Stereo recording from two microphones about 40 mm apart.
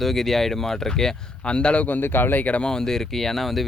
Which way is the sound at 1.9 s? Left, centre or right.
Left.